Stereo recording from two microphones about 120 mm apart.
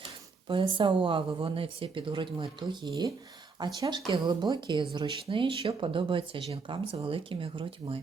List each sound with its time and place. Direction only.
0.0 s speech: 45° right (ahead or behind)